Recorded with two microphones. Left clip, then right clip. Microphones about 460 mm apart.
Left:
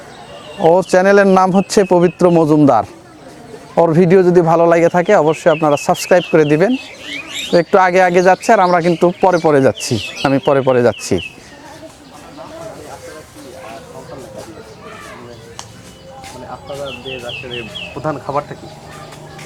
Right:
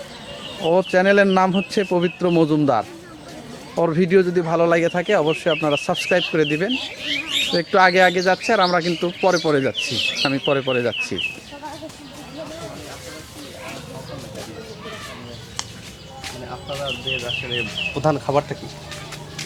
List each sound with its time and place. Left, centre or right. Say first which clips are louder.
0.7 s speech: left 6 dB; left
18.0 s speech: even; right